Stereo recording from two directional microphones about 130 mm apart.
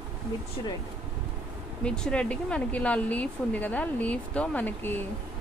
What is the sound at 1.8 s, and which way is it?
Speech, 5° left (ahead or behind).